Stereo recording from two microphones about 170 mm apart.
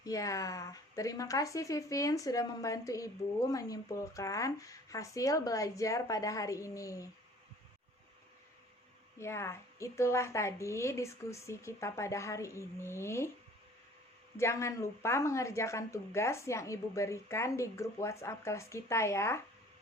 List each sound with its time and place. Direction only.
0.0 s speech: 20° left (ahead or behind)
9.1 s speech: 15° left (ahead or behind)
14.3 s speech: 15° left (ahead or behind)